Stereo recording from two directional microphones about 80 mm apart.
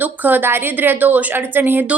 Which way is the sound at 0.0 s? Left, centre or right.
Right.